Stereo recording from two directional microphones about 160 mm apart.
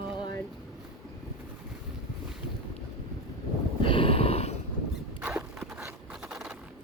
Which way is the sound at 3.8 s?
35° left (ahead or behind).